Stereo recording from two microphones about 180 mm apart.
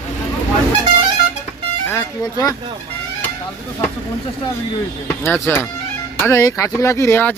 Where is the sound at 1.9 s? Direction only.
20° left (ahead or behind).